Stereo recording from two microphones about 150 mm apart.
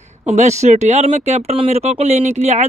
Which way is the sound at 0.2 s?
50° right (ahead or behind).